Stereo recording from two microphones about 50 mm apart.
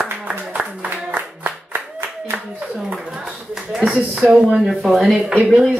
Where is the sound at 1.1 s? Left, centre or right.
Right.